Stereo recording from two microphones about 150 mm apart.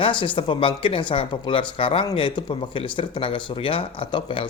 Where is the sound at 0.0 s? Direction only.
35° left (ahead or behind).